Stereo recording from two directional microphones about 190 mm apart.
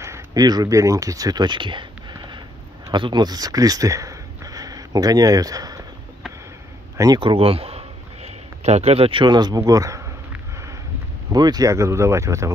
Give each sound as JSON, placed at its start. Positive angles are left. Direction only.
{"t": 0.0, "sound": "speech", "side_deg": -15}
{"t": 7.0, "sound": "a sound", "side_deg": -25}
{"t": 11.3, "sound": "speech", "side_deg": -20}